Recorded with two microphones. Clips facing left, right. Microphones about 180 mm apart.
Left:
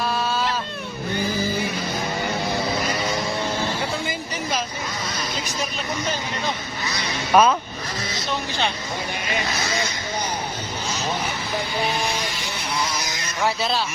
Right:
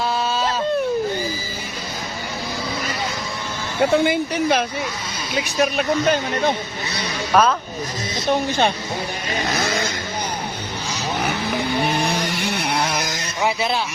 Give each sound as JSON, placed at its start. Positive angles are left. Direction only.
{"t": 3.9, "sound": "speech", "side_deg": -60}
{"t": 5.7, "sound": "speech", "side_deg": -60}
{"t": 7.3, "sound": "speech", "side_deg": 10}
{"t": 8.3, "sound": "speech", "side_deg": -50}
{"t": 11.8, "sound": "a sound", "side_deg": -60}
{"t": 13.4, "sound": "speech", "side_deg": -15}